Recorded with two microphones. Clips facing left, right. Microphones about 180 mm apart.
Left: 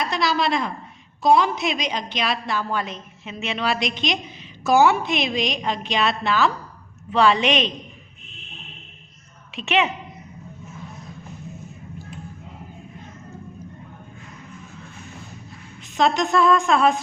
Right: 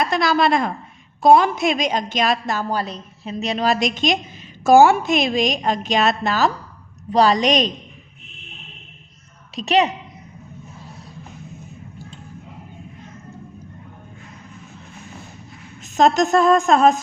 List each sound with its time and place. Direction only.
0.0 s a woman's voice: 50° right (ahead or behind)
9.6 s a woman's voice: 40° right (ahead or behind)
16.0 s a woman's voice: 45° right (ahead or behind)